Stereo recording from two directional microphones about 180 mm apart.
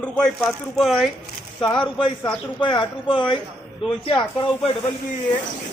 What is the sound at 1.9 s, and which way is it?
Speech, 30° left (ahead or behind).